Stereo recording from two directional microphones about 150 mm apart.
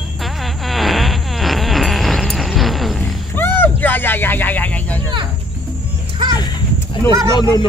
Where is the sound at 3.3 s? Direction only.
15° left (ahead or behind).